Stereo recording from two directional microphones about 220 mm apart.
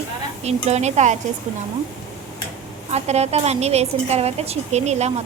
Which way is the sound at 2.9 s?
30° right (ahead or behind).